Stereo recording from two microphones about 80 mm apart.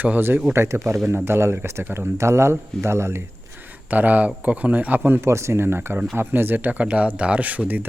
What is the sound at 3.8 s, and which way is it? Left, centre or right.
Speech, right.